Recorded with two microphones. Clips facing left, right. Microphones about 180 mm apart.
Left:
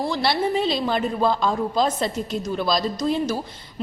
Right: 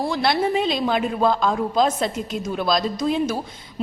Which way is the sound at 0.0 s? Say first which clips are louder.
Right 1 dB; centre (ahead or behind).